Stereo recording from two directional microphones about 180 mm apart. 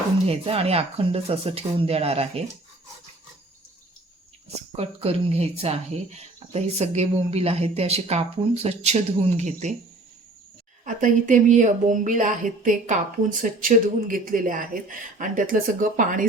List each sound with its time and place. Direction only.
0.3 s speech: 35° right (ahead or behind)
4.8 s speech: 35° right (ahead or behind)
10.8 s speech: 45° right (ahead or behind)